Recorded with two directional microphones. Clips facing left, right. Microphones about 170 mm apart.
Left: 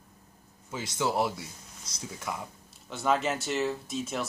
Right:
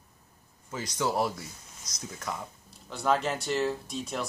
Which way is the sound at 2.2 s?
10° left (ahead or behind).